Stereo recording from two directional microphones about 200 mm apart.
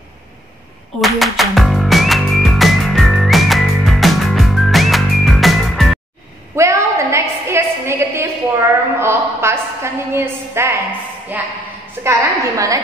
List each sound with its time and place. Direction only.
1.0 s music: centre (ahead or behind)
6.5 s a sound: 15° right (ahead or behind)
9.0 s a woman's voice: 10° right (ahead or behind)